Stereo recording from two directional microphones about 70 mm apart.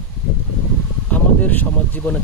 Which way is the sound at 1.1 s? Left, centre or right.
Left.